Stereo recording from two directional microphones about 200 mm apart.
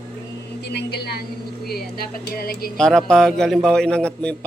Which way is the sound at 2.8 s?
5° left (ahead or behind).